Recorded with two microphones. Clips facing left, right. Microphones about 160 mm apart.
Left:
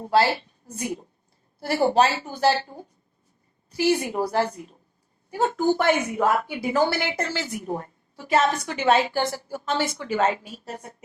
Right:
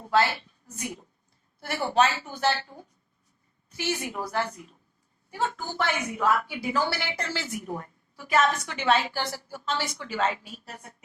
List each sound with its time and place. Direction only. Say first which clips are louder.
0.0 s a woman's voice: left 4 dB; 35° left (ahead or behind)